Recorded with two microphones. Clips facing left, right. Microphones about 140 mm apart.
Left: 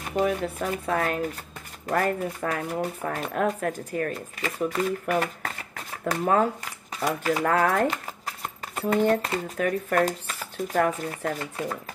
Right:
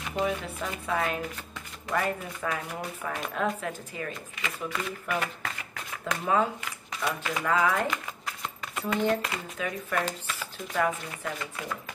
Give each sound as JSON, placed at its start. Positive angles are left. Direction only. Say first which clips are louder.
{"t": 0.0, "sound": "speech", "louder": "left 5 dB", "side_deg": 45}
{"t": 7.4, "sound": "speech", "louder": "left 2 dB", "side_deg": 50}
{"t": 7.9, "sound": "a sound", "louder": "left 1 dB", "side_deg": 40}
{"t": 9.6, "sound": "speech", "louder": "left 7 dB", "side_deg": 50}